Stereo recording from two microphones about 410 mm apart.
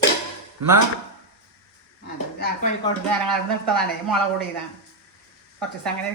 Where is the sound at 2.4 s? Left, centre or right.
Centre.